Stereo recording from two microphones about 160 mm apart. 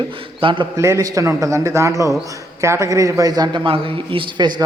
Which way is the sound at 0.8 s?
20° right (ahead or behind).